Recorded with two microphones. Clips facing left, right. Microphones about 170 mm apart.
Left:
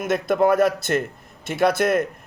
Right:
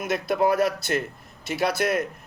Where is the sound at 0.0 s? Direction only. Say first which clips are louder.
Left 4 dB; 50° left (ahead or behind).